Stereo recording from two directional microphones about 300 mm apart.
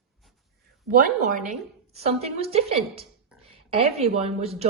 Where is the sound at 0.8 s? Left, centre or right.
Right.